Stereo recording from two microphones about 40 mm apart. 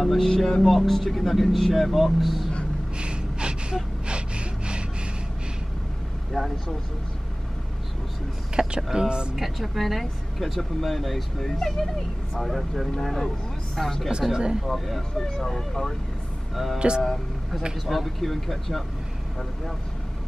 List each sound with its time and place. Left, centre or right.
0.0 s speech: centre
3.0 s gasp: right
6.4 s speech: centre
8.6 s speech: centre
9.4 s speech: centre
14.3 s speech: right
14.7 s speech: centre
16.7 s speech: right
17.8 s speech: centre